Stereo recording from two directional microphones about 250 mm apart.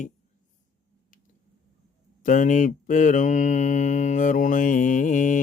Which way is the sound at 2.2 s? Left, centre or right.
Left.